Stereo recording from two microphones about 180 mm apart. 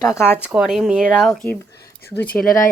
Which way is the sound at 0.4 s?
5° right (ahead or behind).